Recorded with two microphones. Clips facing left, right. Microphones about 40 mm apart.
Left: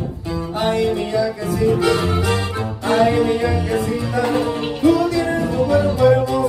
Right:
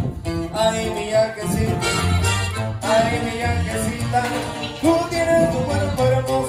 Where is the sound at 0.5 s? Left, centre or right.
Right.